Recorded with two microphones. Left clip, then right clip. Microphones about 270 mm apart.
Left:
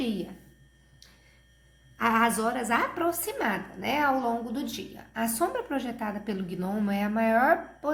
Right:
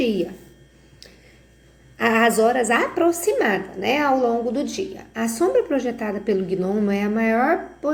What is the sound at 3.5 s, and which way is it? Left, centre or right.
Speech, left.